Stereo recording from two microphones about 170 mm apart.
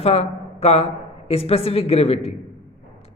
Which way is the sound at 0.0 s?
40° left (ahead or behind).